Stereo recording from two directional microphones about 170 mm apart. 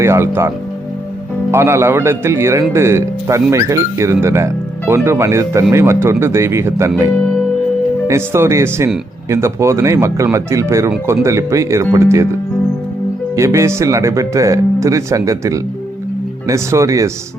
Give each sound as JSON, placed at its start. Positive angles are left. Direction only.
{"t": 0.0, "sound": "speech", "side_deg": -15}
{"t": 13.3, "sound": "speech", "side_deg": -15}